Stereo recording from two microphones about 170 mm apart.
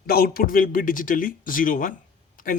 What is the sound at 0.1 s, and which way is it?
Speech, 60° left (ahead or behind).